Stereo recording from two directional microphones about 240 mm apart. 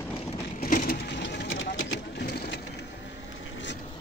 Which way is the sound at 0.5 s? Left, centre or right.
Left.